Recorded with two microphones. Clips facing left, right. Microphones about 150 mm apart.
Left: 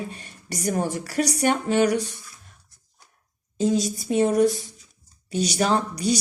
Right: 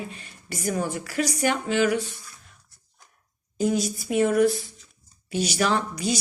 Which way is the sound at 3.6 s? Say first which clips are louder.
Left 2 dB; 30° left (ahead or behind).